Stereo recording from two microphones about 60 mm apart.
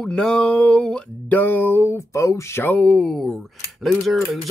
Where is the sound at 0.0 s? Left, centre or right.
Centre.